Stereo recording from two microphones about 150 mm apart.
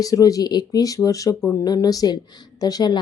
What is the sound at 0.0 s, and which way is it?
Speech, 25° left (ahead or behind).